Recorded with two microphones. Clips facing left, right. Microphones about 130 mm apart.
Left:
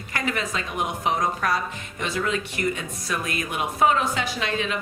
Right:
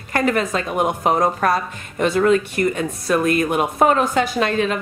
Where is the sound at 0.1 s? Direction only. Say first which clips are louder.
Right 9 dB; 50° right (ahead or behind).